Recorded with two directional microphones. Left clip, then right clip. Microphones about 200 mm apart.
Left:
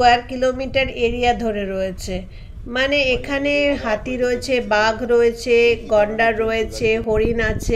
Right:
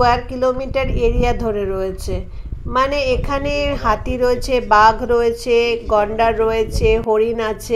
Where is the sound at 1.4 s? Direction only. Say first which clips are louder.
Right 2 dB; 50° right (ahead or behind).